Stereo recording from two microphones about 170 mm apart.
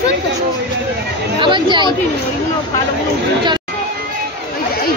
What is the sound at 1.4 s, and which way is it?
Chatter, 30° right (ahead or behind).